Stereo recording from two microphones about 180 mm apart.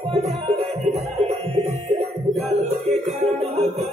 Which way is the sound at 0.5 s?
40° right (ahead or behind).